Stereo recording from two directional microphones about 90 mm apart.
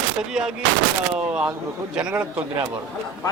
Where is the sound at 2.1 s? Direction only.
15° right (ahead or behind).